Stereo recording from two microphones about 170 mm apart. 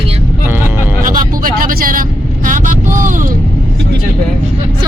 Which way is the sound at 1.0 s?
55° right (ahead or behind).